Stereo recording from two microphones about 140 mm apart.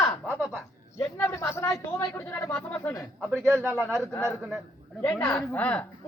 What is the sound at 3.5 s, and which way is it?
Speech, 15° right (ahead or behind).